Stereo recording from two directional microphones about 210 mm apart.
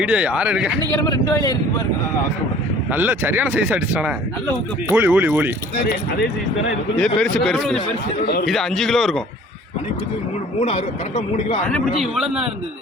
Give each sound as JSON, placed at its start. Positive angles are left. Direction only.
{"t": 0.0, "sound": "a man's voice", "side_deg": -5}
{"t": 1.1, "sound": "a man's voice", "side_deg": 15}
{"t": 2.9, "sound": "speech", "side_deg": -10}
{"t": 7.0, "sound": "a man's voice", "side_deg": 5}
{"t": 8.2, "sound": "a man's voice", "side_deg": 45}
{"t": 8.4, "sound": "a man's voice", "side_deg": 0}
{"t": 10.6, "sound": "speech", "side_deg": 30}
{"t": 11.7, "sound": "a man's voice", "side_deg": 0}